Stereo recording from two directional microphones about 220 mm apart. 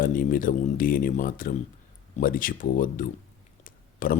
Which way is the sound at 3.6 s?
40° left (ahead or behind).